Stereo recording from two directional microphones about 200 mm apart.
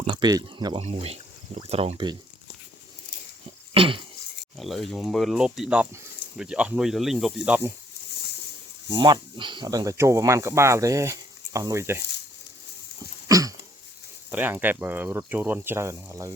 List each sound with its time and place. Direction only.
0.0 s speech: 25° right (ahead or behind)
0.8 s speech: 30° right (ahead or behind)
3.8 s speech: 25° right (ahead or behind)
4.5 s speech: centre (ahead or behind)
8.9 s speech: 20° right (ahead or behind)
13.2 s a sound: 15° right (ahead or behind)
14.3 s speech: 10° right (ahead or behind)